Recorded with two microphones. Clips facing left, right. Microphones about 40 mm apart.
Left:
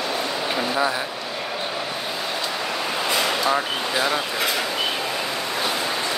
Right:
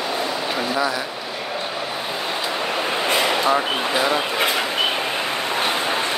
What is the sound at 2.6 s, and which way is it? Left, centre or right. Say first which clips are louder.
Vehicle: right 3 dB; right.